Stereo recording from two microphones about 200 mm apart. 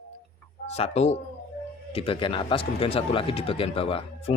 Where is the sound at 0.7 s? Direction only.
30° left (ahead or behind).